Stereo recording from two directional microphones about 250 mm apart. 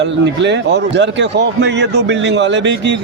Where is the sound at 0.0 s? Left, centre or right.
Right.